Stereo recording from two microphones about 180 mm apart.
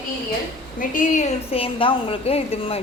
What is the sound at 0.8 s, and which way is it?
A woman's voice, 45° left (ahead or behind).